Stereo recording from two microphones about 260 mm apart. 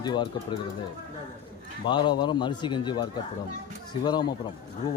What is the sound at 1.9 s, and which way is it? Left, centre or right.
A man's voice, centre.